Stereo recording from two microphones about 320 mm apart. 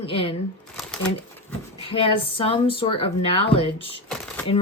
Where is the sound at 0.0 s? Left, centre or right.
Centre.